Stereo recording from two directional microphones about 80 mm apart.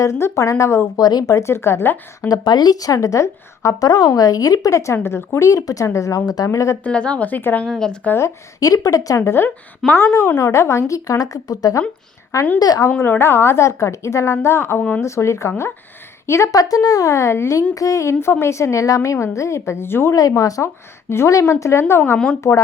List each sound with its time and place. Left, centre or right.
0.0 s speech: left
0.9 s a woman's voice: left
1.4 s speech: left
2.2 s a woman's voice: left
6.5 s speech: left
6.8 s speech: centre
7.7 s speech: centre
8.2 s a woman's voice: left
13.0 s a woman's voice: left
20.1 s a woman's voice: left